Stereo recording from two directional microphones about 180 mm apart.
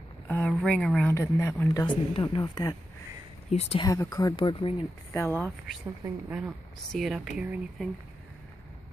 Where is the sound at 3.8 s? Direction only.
20° left (ahead or behind).